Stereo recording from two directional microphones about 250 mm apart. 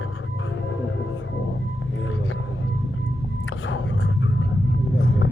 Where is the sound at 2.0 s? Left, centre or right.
Left.